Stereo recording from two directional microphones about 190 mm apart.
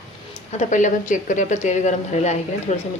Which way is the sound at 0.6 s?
40° left (ahead or behind).